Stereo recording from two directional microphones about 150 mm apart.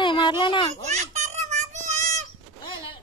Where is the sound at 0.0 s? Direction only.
30° left (ahead or behind).